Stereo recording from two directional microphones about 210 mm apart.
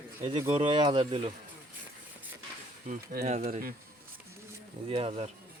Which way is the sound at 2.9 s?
35° right (ahead or behind).